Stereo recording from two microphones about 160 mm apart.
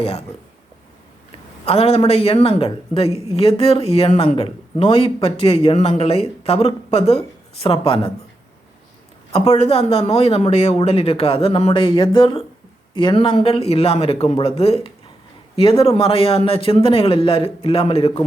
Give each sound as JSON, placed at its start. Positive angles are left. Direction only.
{"t": 0.0, "sound": "speech", "side_deg": 40}
{"t": 1.6, "sound": "speech", "side_deg": 40}
{"t": 3.1, "sound": "a woman's voice", "side_deg": -20}
{"t": 3.3, "sound": "speech", "side_deg": 35}
{"t": 9.3, "sound": "speech", "side_deg": 40}